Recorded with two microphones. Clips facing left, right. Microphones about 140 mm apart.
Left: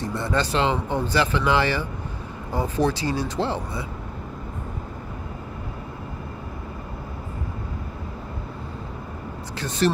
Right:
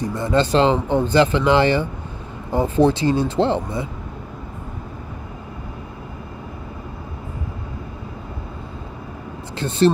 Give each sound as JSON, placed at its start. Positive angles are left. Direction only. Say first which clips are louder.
{"t": 0.1, "sound": "speech", "louder": "right 6 dB", "side_deg": -20}
{"t": 0.5, "sound": "speech", "louder": "right 6 dB", "side_deg": -30}
{"t": 9.6, "sound": "speech", "louder": "right 6 dB", "side_deg": -25}